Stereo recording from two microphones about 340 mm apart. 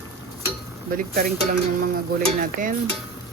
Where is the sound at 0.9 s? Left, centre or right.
Right.